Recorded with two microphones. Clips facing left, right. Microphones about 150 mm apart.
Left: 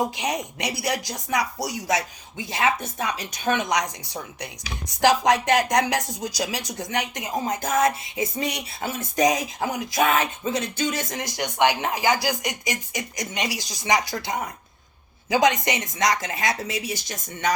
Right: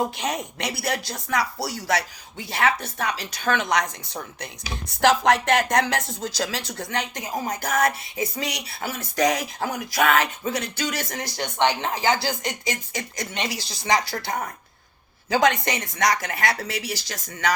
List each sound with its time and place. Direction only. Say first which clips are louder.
0.0 s speech: even; 15° left (ahead or behind)